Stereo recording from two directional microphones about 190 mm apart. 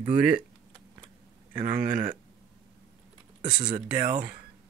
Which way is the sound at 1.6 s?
45° right (ahead or behind).